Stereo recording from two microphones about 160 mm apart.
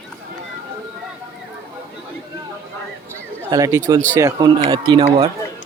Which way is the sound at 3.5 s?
20° right (ahead or behind).